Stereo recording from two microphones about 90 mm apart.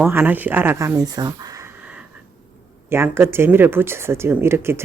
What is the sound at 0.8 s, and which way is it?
Speech, 40° right (ahead or behind).